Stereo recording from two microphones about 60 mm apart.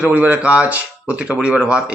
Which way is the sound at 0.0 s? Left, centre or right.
Right.